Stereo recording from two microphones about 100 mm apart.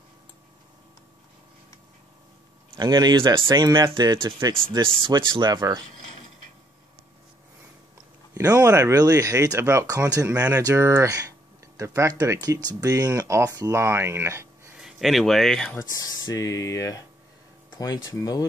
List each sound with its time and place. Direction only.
2.8 s speech: 45° right (ahead or behind)
8.6 s speech: 30° right (ahead or behind)
14.8 s speech: centre (ahead or behind)
15.8 s speech: 40° left (ahead or behind)